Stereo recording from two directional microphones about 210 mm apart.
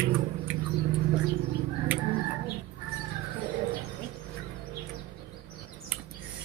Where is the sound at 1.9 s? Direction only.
10° right (ahead or behind).